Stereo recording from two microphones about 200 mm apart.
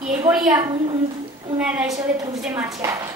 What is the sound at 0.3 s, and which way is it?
Speech, 5° right (ahead or behind).